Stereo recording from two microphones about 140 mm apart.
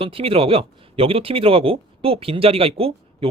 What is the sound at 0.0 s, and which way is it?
Speech, 40° right (ahead or behind).